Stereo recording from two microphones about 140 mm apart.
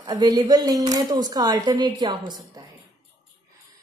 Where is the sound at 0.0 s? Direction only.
25° right (ahead or behind).